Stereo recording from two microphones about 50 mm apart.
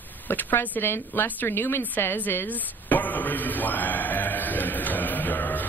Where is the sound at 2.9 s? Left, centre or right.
Left.